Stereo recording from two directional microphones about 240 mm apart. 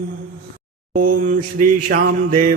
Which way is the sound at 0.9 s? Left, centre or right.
Right.